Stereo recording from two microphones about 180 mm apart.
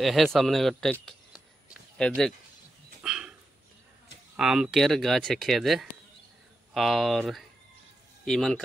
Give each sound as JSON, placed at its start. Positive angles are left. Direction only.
{"t": 0.0, "sound": "speech", "side_deg": 0}
{"t": 1.0, "sound": "a sound", "side_deg": 0}
{"t": 3.0, "sound": "dog", "side_deg": -5}
{"t": 4.4, "sound": "speech", "side_deg": -5}